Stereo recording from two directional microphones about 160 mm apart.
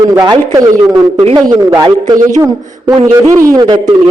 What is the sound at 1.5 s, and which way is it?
Speech, 25° right (ahead or behind).